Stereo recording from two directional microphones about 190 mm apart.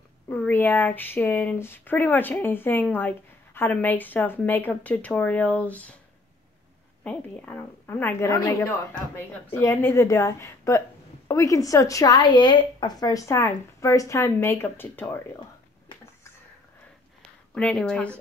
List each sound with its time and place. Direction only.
0.3 s speech: 10° left (ahead or behind)
7.0 s speech: 10° left (ahead or behind)
17.6 s speech: 5° left (ahead or behind)